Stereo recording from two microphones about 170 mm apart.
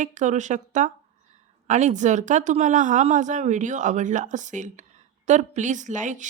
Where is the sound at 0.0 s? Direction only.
45° right (ahead or behind).